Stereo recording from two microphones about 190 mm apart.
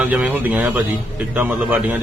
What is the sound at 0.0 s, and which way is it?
A man's voice, 5° right (ahead or behind).